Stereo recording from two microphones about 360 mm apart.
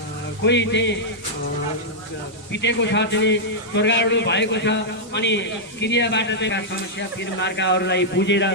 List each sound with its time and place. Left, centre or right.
0.4 s a man's voice: left
2.5 s a man's voice: left